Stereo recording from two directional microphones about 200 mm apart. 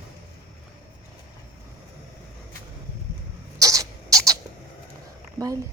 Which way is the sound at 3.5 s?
15° right (ahead or behind).